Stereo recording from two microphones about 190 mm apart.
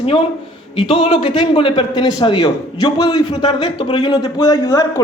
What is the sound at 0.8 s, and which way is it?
A man's voice, 30° left (ahead or behind).